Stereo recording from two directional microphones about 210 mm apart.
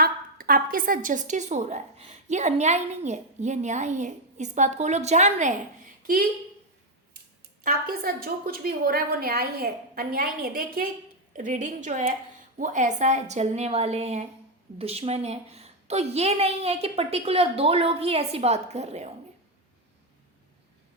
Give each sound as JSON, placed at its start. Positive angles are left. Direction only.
{"t": 0.0, "sound": "speech", "side_deg": -45}
{"t": 7.6, "sound": "a woman's voice", "side_deg": -45}